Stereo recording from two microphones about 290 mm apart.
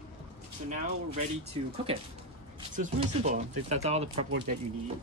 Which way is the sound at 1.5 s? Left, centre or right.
Centre.